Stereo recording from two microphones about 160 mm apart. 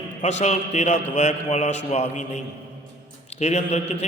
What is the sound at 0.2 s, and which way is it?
A man's voice, 45° left (ahead or behind).